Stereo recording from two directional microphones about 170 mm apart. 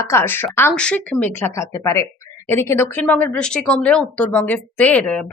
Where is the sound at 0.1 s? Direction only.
15° left (ahead or behind).